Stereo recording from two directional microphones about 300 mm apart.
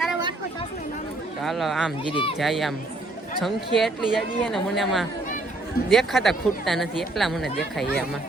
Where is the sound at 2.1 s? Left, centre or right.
Centre.